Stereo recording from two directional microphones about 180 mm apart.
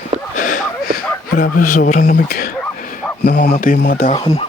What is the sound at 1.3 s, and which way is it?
Speech, 50° left (ahead or behind).